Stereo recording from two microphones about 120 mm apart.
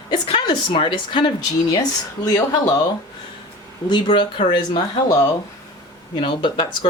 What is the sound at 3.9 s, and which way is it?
Speech, 40° left (ahead or behind).